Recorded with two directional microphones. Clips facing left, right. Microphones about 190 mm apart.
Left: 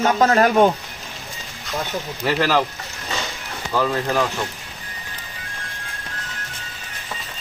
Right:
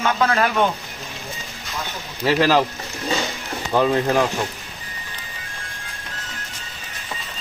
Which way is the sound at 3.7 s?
20° right (ahead or behind).